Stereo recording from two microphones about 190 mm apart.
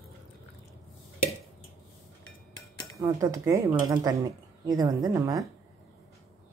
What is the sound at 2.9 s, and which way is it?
A woman's voice, 15° right (ahead or behind).